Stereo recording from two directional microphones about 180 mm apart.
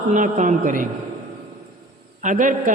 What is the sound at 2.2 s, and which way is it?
Speech, 45° right (ahead or behind).